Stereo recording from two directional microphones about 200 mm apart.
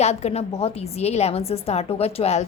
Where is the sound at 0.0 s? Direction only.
35° left (ahead or behind).